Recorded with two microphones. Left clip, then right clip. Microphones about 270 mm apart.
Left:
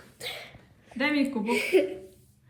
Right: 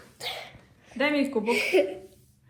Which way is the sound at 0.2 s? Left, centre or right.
Centre.